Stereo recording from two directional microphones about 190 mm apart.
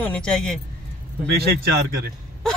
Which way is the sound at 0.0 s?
5° left (ahead or behind).